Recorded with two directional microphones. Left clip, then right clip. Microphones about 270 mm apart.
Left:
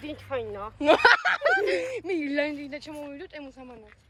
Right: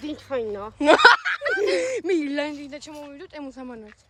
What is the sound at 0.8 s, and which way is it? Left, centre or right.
Speech, centre.